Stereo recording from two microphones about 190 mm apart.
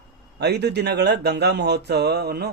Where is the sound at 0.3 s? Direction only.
60° right (ahead or behind).